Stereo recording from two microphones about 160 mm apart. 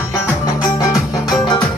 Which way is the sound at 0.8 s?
20° left (ahead or behind).